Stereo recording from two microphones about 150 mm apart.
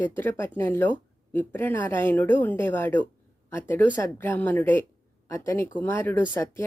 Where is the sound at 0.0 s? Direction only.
10° left (ahead or behind).